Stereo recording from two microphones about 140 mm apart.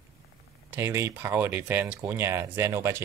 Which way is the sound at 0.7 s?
20° right (ahead or behind).